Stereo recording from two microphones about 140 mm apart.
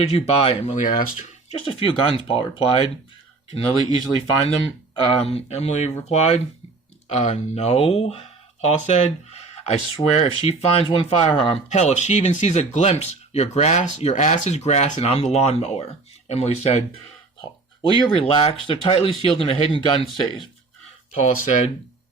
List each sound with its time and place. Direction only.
0.0 s speech: 45° left (ahead or behind)
0.8 s speech: 70° left (ahead or behind)
1.5 s speech: 45° left (ahead or behind)
5.2 s speech: 50° left (ahead or behind)
17.9 s speech: 40° left (ahead or behind)
21.2 s speech: 65° left (ahead or behind)